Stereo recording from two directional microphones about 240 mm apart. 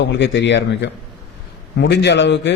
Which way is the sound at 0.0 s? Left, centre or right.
Left.